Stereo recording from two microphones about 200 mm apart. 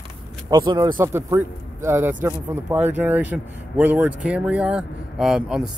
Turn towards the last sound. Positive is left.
turn(degrees=0)  # may be behind; listen again after turning